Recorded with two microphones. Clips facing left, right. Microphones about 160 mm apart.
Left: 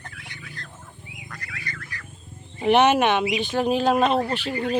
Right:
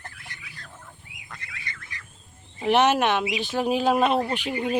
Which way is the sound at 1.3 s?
25° right (ahead or behind).